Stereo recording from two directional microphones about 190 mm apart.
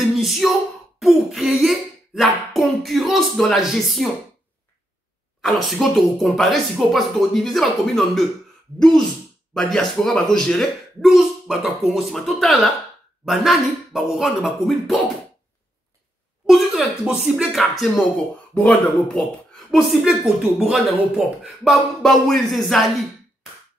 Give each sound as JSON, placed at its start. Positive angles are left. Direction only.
{"t": 0.0, "sound": "a sound", "side_deg": 0}
{"t": 5.4, "sound": "speech", "side_deg": 0}
{"t": 16.4, "sound": "speech", "side_deg": 0}